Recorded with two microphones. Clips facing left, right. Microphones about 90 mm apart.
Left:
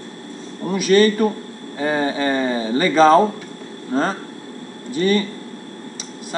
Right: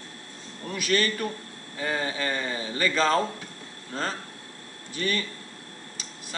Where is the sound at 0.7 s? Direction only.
25° left (ahead or behind).